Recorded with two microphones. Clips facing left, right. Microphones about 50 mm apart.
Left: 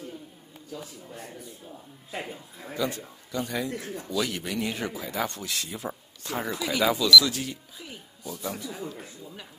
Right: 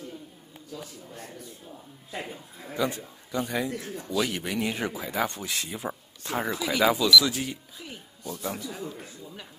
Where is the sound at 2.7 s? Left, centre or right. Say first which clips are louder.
Right 1 dB; right.